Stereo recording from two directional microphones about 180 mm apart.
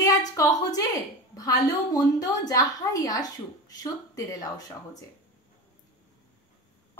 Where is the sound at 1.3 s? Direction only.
20° left (ahead or behind).